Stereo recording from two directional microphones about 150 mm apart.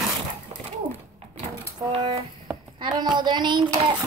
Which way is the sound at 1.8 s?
30° right (ahead or behind).